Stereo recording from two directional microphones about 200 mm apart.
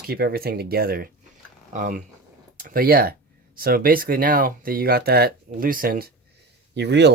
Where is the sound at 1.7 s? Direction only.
40° right (ahead or behind).